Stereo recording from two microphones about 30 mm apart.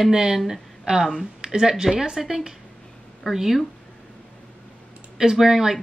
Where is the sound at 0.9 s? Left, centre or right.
Right.